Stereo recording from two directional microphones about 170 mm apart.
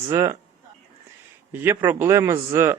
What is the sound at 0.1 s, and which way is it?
Speech, 20° right (ahead or behind).